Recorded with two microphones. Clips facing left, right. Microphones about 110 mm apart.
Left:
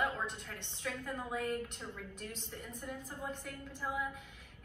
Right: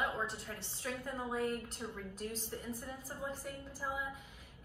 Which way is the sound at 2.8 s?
5° right (ahead or behind).